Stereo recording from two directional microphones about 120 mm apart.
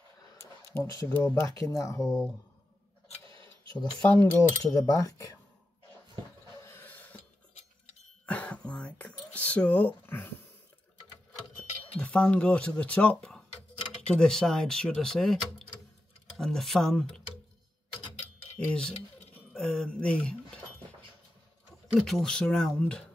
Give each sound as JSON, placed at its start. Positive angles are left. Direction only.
{"t": 0.7, "sound": "speech", "side_deg": 25}
{"t": 3.7, "sound": "speech", "side_deg": 15}
{"t": 4.7, "sound": "speech", "side_deg": 25}
{"t": 6.7, "sound": "a sound", "side_deg": 15}
{"t": 8.3, "sound": "whispering", "side_deg": 10}
{"t": 12.0, "sound": "speech", "side_deg": 10}
{"t": 16.3, "sound": "speech", "side_deg": 5}
{"t": 18.6, "sound": "speech", "side_deg": 10}
{"t": 22.0, "sound": "speech", "side_deg": 5}